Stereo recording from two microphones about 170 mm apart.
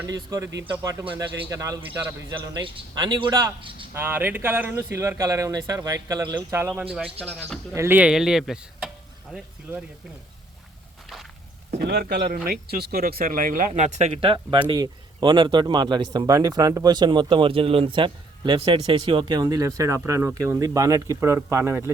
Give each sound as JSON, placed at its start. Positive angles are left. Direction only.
{"t": 0.0, "sound": "speech", "side_deg": -20}
{"t": 3.9, "sound": "speech", "side_deg": -10}
{"t": 6.9, "sound": "speech", "side_deg": -5}
{"t": 11.8, "sound": "speech", "side_deg": -65}